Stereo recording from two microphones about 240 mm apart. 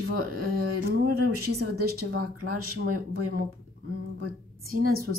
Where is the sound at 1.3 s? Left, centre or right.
Right.